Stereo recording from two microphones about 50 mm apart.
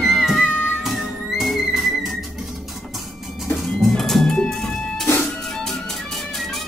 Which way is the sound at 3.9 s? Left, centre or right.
Centre.